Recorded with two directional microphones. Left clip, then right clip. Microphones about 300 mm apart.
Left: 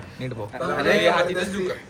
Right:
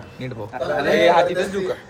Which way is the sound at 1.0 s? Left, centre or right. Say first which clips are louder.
Right 5 dB; right.